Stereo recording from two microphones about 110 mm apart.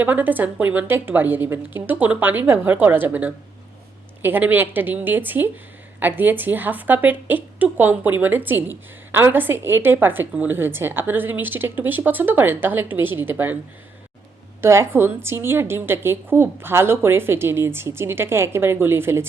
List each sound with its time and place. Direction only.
0.0 s a woman's voice: 15° right (ahead or behind)
14.6 s a woman's voice: 25° right (ahead or behind)